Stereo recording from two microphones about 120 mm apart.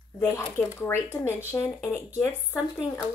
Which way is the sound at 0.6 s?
10° left (ahead or behind).